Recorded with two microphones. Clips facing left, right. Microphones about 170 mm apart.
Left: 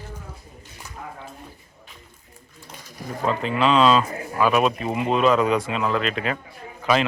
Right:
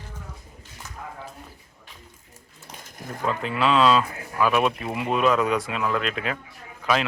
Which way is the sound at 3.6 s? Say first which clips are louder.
Left 2 dB; 5° right (ahead or behind).